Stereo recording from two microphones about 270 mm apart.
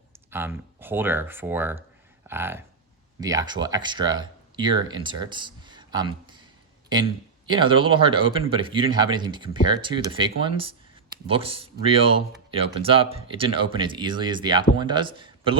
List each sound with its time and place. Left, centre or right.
0.3 s speech: centre
7.5 s speech: centre